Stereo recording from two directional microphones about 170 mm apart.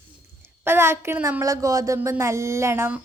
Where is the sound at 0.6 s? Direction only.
15° right (ahead or behind).